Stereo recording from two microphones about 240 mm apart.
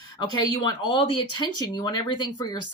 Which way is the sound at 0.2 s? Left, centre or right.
Centre.